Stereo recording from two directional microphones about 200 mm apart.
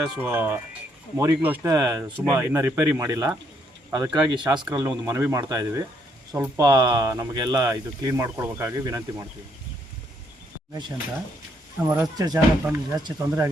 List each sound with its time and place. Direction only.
0.0 s speech: 10° right (ahead or behind)
11.9 s speech: 15° right (ahead or behind)